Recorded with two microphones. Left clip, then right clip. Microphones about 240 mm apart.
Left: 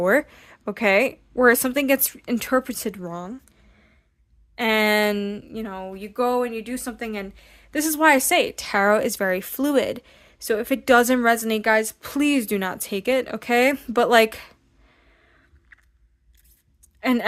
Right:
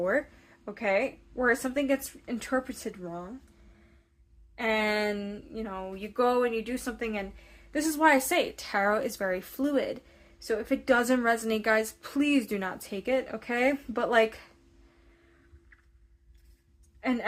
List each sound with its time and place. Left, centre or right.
0.0 s a woman's voice: left
4.5 s speech: left
15.7 s biting: left
17.0 s a woman's voice: left